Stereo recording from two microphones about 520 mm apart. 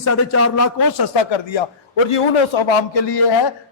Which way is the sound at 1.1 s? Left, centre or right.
Left.